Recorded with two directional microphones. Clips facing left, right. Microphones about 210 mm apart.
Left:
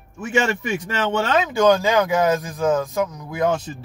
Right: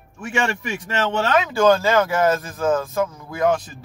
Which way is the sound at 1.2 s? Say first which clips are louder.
Even; 20° left (ahead or behind).